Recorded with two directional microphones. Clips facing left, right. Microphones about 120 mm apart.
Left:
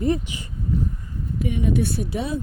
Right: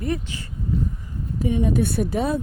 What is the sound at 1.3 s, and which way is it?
Speech, 35° right (ahead or behind).